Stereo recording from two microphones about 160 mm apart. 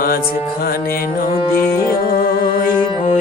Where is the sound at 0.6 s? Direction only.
65° left (ahead or behind).